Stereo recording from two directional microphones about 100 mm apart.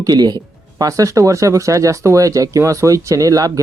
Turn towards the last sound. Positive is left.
turn(degrees=-35)  # may be behind; listen again after turning